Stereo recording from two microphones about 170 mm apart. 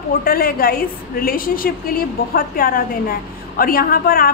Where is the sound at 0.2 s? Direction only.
60° left (ahead or behind).